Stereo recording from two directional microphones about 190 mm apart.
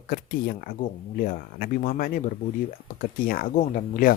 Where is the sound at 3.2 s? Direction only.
50° left (ahead or behind).